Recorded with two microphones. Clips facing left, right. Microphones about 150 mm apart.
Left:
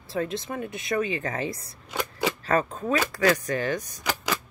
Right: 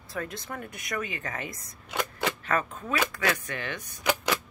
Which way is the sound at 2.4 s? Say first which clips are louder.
Left 8 dB; 35° left (ahead or behind).